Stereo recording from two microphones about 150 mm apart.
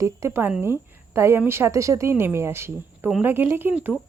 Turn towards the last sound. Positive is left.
turn(degrees=-10)  # may be behind; listen again after turning